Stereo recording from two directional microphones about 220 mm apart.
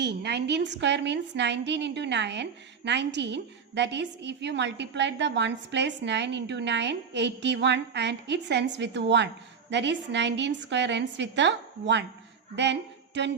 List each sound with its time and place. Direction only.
0.0 s a woman's voice: 50° right (ahead or behind)
13.2 s a woman's voice: 50° right (ahead or behind)